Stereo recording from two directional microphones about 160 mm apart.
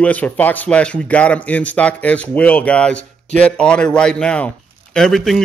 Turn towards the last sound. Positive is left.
turn(degrees=0)  # may be behind; listen again after turning